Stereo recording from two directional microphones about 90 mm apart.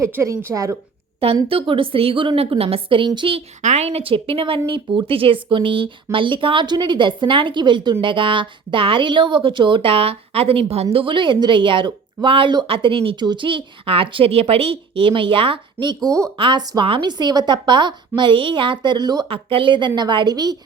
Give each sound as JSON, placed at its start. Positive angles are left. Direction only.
{"t": 0.1, "sound": "a woman's voice", "side_deg": -30}
{"t": 1.5, "sound": "speech", "side_deg": -80}
{"t": 8.0, "sound": "speech", "side_deg": -70}
{"t": 10.9, "sound": "speech", "side_deg": -70}
{"t": 12.6, "sound": "speech", "side_deg": -85}
{"t": 13.1, "sound": "speech", "side_deg": -60}
{"t": 16.0, "sound": "a woman's voice", "side_deg": -35}
{"t": 16.4, "sound": "a woman's voice", "side_deg": -55}
{"t": 17.1, "sound": "a woman's voice", "side_deg": -50}
{"t": 18.2, "sound": "a woman's voice", "side_deg": -65}
{"t": 19.3, "sound": "speech", "side_deg": -80}
{"t": 20.0, "sound": "a woman's voice", "side_deg": -55}